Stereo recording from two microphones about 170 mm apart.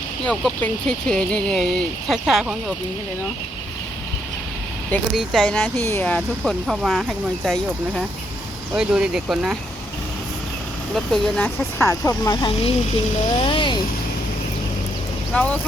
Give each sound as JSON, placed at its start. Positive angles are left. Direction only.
{"t": 0.3, "sound": "speech", "side_deg": 5}
{"t": 5.1, "sound": "speech", "side_deg": 5}
{"t": 10.9, "sound": "speech", "side_deg": 5}
{"t": 11.9, "sound": "speech", "side_deg": 20}
{"t": 15.3, "sound": "speech", "side_deg": 10}